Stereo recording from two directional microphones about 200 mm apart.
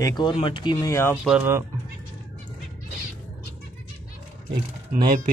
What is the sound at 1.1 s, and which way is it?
Speech, centre (ahead or behind).